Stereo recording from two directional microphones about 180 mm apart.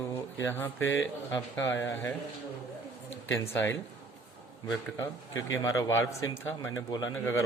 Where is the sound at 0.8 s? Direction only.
90° left.